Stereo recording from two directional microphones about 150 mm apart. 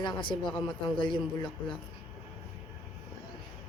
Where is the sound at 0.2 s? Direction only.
35° left (ahead or behind).